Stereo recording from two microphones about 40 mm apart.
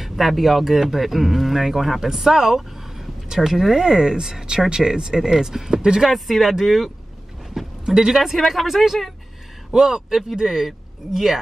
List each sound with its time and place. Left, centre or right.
0.0 s a man's voice: centre
6.0 s a man's voice: centre
9.7 s speech: centre